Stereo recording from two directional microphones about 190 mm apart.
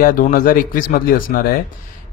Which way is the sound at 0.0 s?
45° left (ahead or behind).